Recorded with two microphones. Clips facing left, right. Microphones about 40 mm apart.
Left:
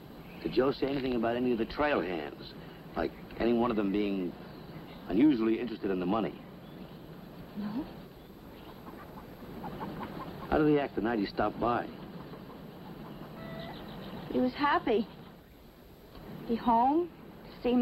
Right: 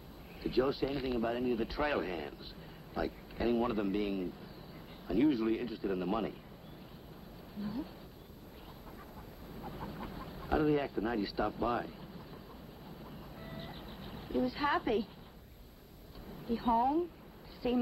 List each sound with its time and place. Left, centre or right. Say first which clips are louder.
0.4 s a man's voice: left 3 dB; centre
7.6 s speech: left 3 dB; centre
9.6 s chicken: left 4 dB; centre
13.4 s a sound: left 4 dB; centre
16.4 s speech: left 4 dB; centre